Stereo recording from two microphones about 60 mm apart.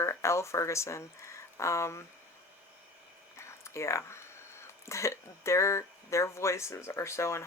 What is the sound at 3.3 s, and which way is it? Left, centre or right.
Speech, left.